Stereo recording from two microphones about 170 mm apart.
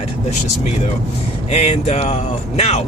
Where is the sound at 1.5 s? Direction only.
35° left (ahead or behind).